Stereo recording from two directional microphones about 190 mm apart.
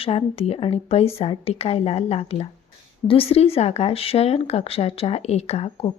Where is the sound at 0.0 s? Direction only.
30° left (ahead or behind).